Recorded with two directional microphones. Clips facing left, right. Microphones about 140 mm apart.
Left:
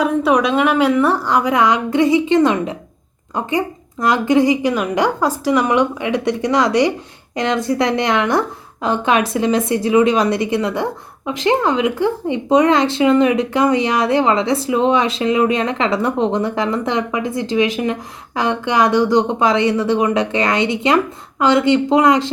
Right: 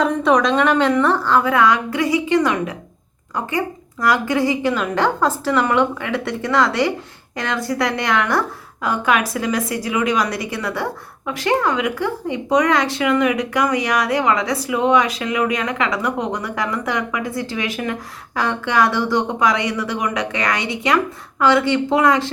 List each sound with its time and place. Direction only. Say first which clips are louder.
0.0 s a woman's voice: left 1 dB; 5° left (ahead or behind); by 2.7 s 25° left (ahead or behind)
4.0 s a woman's voice: left 4 dB; 20° left (ahead or behind)